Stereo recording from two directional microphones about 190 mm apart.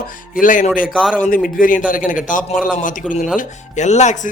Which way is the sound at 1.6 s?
45° left (ahead or behind).